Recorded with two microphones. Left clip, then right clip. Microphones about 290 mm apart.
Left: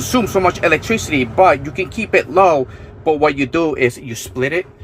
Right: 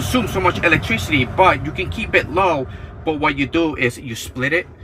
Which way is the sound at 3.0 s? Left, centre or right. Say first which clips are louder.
Left 4 dB; centre.